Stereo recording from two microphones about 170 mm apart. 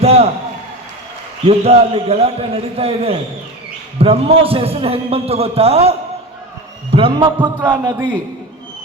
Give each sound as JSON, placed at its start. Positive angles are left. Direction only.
{"t": 0.0, "sound": "a sound", "side_deg": -35}
{"t": 1.5, "sound": "a man's voice", "side_deg": -35}
{"t": 6.9, "sound": "a man's voice", "side_deg": -30}
{"t": 7.9, "sound": "a man's voice", "side_deg": -15}